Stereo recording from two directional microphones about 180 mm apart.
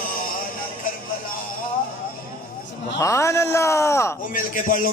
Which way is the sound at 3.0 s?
15° left (ahead or behind).